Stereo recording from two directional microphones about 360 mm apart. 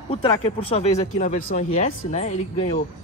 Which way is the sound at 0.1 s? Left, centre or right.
Centre.